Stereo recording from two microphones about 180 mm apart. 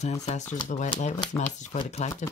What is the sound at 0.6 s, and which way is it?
Speech, 25° left (ahead or behind).